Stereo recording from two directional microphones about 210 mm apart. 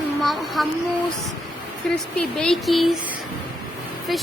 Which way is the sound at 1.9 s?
5° left (ahead or behind).